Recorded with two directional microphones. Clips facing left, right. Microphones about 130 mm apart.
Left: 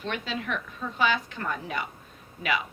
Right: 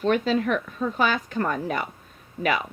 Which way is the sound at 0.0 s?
45° right (ahead or behind).